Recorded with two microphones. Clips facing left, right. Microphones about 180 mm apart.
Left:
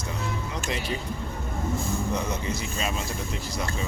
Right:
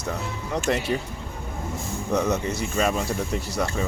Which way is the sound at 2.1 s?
70° right (ahead or behind).